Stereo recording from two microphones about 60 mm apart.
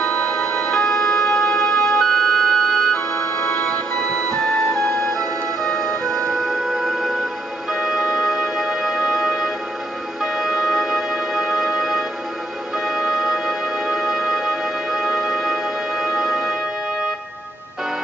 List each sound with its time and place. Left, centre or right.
0.0 s music: centre
6.4 s music: centre